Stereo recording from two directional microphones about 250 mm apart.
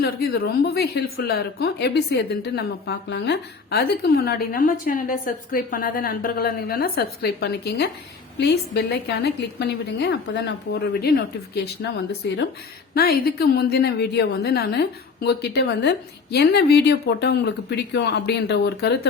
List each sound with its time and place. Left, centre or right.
0.0 s a woman's voice: left
12.2 s a woman's voice: left